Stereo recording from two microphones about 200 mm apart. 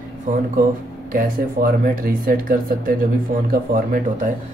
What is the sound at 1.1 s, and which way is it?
Speech, 45° right (ahead or behind).